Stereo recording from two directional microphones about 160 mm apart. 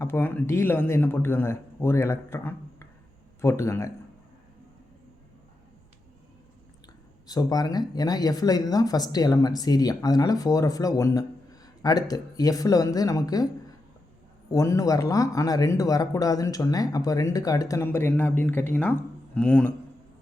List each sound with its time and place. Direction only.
0.0 s a man's voice: 15° left (ahead or behind)
7.3 s speech: 25° left (ahead or behind)
14.5 s speech: 20° left (ahead or behind)